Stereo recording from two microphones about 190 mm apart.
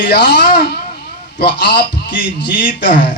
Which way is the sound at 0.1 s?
60° left (ahead or behind).